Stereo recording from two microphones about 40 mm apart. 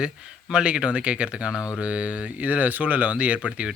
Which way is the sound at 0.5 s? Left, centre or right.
Right.